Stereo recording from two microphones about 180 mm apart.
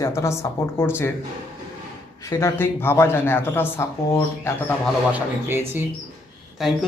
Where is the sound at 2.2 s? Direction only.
15° left (ahead or behind).